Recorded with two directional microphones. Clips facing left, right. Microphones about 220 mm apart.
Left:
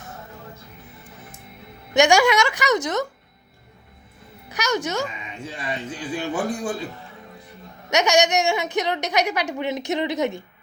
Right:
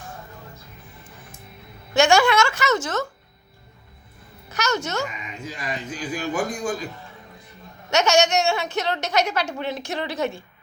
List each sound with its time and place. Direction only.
1.9 s a woman's voice: 15° left (ahead or behind)
4.4 s speech: 15° left (ahead or behind)
5.0 s speech: 30° left (ahead or behind)
7.9 s a woman's voice: 15° left (ahead or behind)